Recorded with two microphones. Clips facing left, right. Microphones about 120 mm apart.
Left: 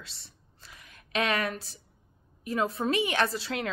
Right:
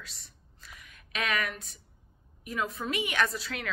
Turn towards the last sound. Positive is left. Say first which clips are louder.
# left 2 dB
turn(degrees=30)  # may be behind; listen again after turning